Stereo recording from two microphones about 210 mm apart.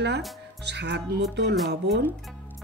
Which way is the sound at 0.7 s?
55° right (ahead or behind).